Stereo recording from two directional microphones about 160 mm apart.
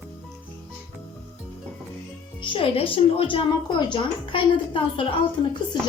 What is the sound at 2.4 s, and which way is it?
A woman's voice, 35° left (ahead or behind).